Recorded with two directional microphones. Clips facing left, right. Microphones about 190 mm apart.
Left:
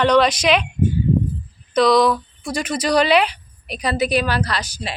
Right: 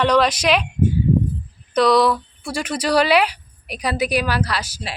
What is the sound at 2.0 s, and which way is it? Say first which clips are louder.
Speech: left 1 dB; 15° left (ahead or behind).